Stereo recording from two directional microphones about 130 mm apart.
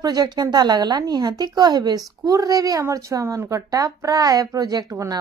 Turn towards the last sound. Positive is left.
turn(degrees=-25)  # may be behind; listen again after turning